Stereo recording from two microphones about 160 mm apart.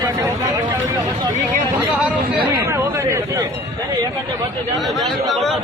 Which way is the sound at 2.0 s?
10° right (ahead or behind).